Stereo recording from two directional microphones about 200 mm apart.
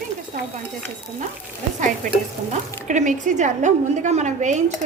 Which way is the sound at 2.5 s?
35° right (ahead or behind).